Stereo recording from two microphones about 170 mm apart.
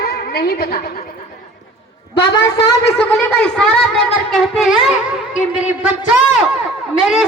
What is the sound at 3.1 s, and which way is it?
A woman's voice, 5° left (ahead or behind).